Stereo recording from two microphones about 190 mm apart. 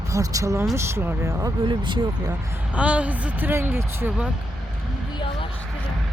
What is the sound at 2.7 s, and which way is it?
Speech, 5° right (ahead or behind).